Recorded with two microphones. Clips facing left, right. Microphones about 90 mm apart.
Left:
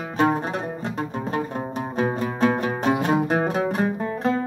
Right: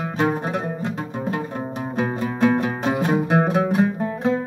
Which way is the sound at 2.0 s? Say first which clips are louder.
Right 1 dB; 5° right (ahead or behind).